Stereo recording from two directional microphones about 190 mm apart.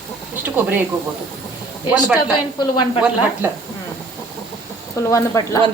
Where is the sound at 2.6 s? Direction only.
25° left (ahead or behind).